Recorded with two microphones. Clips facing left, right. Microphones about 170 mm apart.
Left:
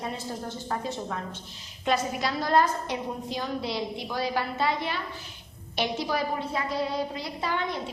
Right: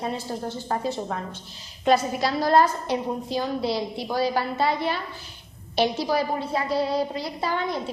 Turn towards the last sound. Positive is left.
turn(degrees=-35)  # may be behind; listen again after turning